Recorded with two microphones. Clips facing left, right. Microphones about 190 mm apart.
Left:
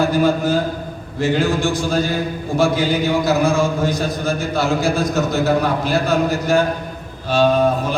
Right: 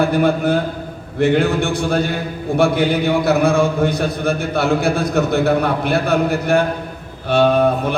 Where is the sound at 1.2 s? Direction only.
60° right (ahead or behind).